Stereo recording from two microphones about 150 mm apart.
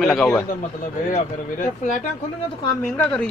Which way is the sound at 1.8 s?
55° left (ahead or behind).